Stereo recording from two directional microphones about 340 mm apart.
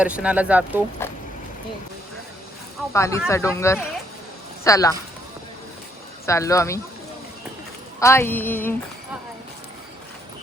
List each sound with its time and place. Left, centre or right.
0.0 s speech: centre
1.0 s a sound: centre
2.9 s speech: centre
6.2 s speech: centre
7.9 s speech: centre